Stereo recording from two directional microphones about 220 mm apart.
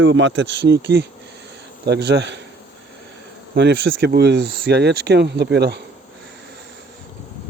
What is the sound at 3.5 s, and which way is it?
Speech, 55° right (ahead or behind).